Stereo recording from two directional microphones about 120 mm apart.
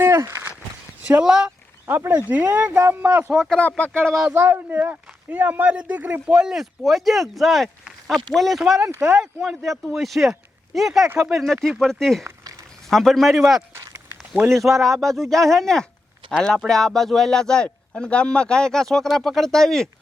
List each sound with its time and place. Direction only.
0.0 s a sound: 20° right (ahead or behind)
1.0 s speech: 10° right (ahead or behind)
1.5 s a sound: 20° right (ahead or behind)
2.3 s speech: 15° right (ahead or behind)
3.5 s speech: 10° left (ahead or behind)
4.0 s a man's voice: centre (ahead or behind)
4.3 s a man's voice: 20° right (ahead or behind); by 13.4 s centre (ahead or behind)
13.8 s a sound: 25° right (ahead or behind)
14.8 s a man's voice: centre (ahead or behind)